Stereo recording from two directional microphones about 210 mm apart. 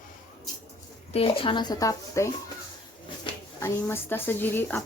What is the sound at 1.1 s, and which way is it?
Speech, 25° left (ahead or behind).